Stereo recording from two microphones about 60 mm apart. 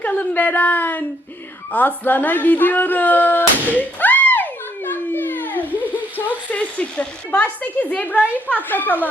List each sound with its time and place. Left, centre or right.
0.0 s speech: left
3.8 s a sound: left
8.4 s speech: left